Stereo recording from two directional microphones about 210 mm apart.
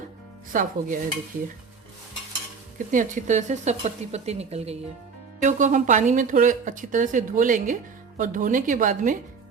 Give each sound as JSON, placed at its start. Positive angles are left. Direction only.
{"t": 0.5, "sound": "speech", "side_deg": -40}
{"t": 2.7, "sound": "speech", "side_deg": -40}